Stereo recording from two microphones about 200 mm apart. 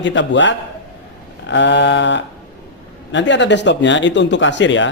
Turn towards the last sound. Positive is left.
turn(degrees=65)  # may be behind; listen again after turning